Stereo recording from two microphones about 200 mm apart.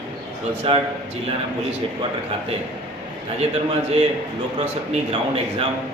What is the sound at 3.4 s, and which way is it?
Speech, 30° right (ahead or behind).